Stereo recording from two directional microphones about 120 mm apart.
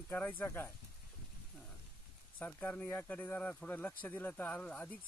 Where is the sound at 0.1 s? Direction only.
15° left (ahead or behind).